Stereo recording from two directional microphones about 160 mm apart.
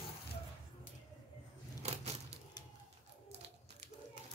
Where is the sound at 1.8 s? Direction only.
45° right (ahead or behind).